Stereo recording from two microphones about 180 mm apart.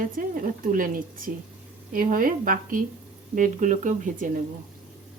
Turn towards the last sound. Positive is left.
turn(degrees=-45)  # may be behind; listen again after turning